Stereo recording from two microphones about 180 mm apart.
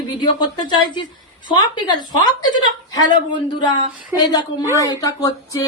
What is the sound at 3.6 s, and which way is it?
A woman's voice, 25° left (ahead or behind).